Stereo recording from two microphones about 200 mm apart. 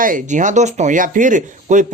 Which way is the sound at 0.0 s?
40° right (ahead or behind).